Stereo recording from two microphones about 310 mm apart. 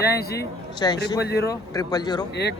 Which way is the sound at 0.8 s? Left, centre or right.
Centre.